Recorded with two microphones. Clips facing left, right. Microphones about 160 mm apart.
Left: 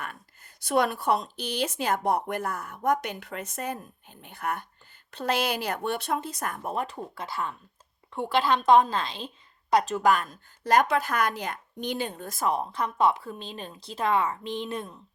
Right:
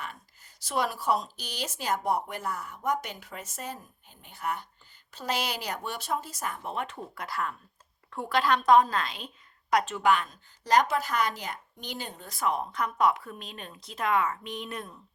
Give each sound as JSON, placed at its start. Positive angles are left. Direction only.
{"t": 0.0, "sound": "a sound", "side_deg": 55}
{"t": 0.9, "sound": "speech", "side_deg": 60}
{"t": 6.4, "sound": "speech", "side_deg": 45}
{"t": 7.2, "sound": "a woman's voice", "side_deg": 25}
{"t": 12.7, "sound": "speech", "side_deg": 30}